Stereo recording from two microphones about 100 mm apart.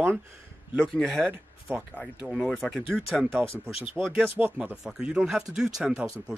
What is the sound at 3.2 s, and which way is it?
Speech, 20° right (ahead or behind).